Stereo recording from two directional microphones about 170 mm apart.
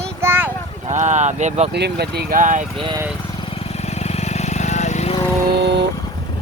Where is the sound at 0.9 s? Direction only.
45° right (ahead or behind).